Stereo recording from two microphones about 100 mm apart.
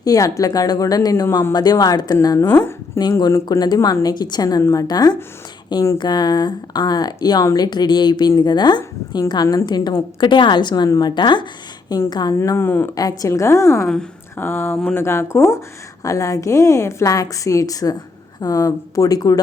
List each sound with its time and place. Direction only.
0.0 s a woman's voice: 35° left (ahead or behind)
2.5 s a woman's voice: 20° left (ahead or behind)
3.0 s a woman's voice: 45° left (ahead or behind)
10.8 s a woman's voice: 35° left (ahead or behind)
11.1 s a woman's voice: 50° left (ahead or behind)
12.4 s a woman's voice: 25° left (ahead or behind)
13.0 s a woman's voice: 35° left (ahead or behind)